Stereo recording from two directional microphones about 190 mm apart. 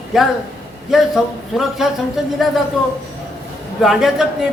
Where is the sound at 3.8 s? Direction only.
Centre (ahead or behind).